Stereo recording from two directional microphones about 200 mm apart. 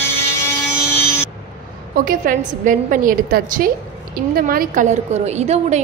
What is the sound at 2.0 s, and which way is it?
A woman's voice, 45° right (ahead or behind).